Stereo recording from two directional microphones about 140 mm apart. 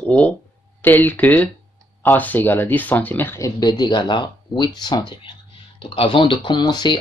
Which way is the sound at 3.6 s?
30° left (ahead or behind).